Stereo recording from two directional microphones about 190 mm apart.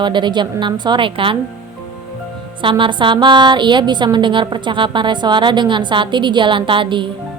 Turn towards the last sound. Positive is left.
turn(degrees=-25)  # may be behind; listen again after turning